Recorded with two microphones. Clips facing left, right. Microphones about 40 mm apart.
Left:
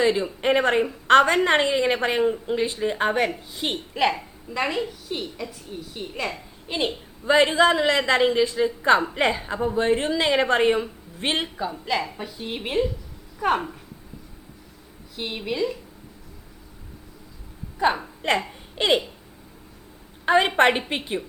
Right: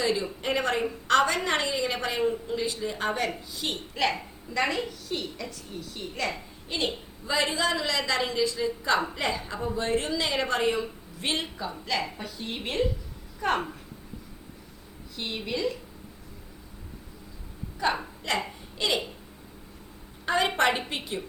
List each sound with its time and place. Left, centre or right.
0.0 s a woman's voice: left
3.9 s a woman's voice: centre
7.3 s a woman's voice: left
11.9 s a woman's voice: centre
15.1 s a woman's voice: centre
17.8 s a woman's voice: left
20.2 s a woman's voice: left